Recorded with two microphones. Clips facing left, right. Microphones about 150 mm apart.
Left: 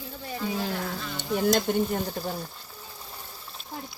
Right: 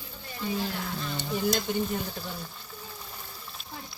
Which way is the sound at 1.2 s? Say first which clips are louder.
Left 5 dB; 55° left (ahead or behind).